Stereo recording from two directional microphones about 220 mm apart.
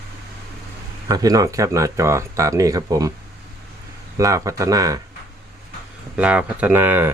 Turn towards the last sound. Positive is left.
turn(degrees=-10)  # may be behind; listen again after turning